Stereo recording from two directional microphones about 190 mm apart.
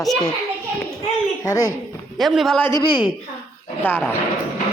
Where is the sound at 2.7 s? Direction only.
20° left (ahead or behind).